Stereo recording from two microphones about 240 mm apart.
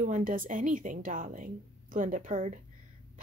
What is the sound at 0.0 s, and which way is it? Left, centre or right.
A woman's voice, right.